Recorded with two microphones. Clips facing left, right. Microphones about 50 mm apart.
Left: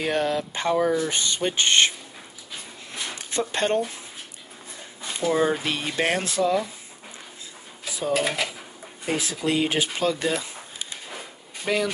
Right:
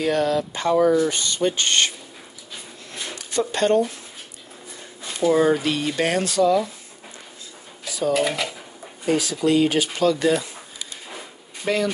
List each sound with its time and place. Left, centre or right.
0.0 s speech: left
3.3 s speech: left
5.3 s speech: left
7.8 s dishes: left
8.1 s speech: centre
9.1 s speech: left
11.7 s speech: centre